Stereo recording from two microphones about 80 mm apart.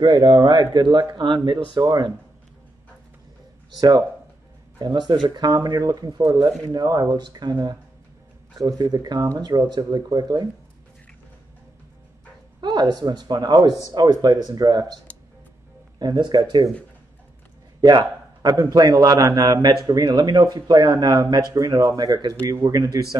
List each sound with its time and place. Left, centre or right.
0.0 s speech: right
1.7 s speech: right
3.7 s speech: right
12.5 s speech: right
16.0 s speech: right
17.9 s a man's voice: right
19.4 s a man's voice: right